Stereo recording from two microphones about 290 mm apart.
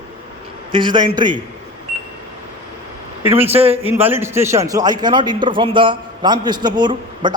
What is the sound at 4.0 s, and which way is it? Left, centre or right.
A man's voice, centre.